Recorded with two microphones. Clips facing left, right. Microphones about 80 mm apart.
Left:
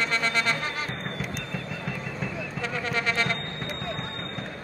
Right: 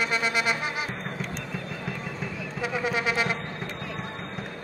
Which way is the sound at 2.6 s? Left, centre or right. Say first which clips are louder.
Right 2 dB; centre.